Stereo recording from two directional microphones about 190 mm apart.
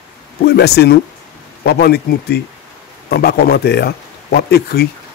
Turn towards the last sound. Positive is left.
turn(degrees=55)  # may be behind; listen again after turning